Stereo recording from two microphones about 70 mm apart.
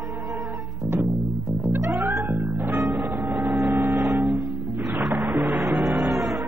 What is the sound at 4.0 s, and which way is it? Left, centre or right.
Music, centre.